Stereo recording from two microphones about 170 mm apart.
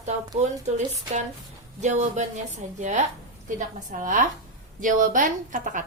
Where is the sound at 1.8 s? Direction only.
45° right (ahead or behind).